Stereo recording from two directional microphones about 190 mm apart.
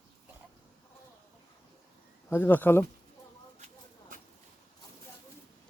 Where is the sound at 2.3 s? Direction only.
10° left (ahead or behind).